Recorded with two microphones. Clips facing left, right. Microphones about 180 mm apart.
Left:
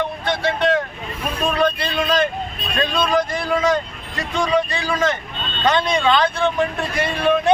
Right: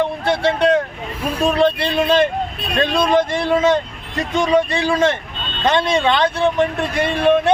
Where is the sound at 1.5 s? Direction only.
25° right (ahead or behind).